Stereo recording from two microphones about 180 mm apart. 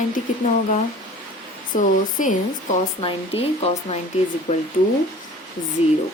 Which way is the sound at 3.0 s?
35° left (ahead or behind).